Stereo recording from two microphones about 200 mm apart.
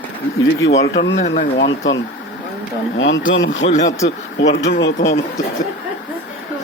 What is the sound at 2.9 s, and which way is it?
Speech, 70° left (ahead or behind).